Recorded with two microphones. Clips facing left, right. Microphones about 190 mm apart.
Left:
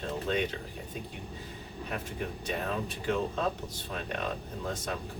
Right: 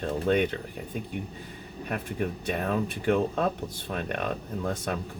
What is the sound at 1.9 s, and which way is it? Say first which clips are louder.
Speech: right 6 dB; 55° right (ahead or behind).